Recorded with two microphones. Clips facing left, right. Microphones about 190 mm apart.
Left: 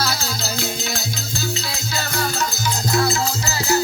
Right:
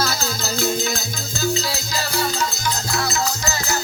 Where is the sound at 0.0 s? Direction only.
50° right (ahead or behind); by 2.3 s 35° right (ahead or behind).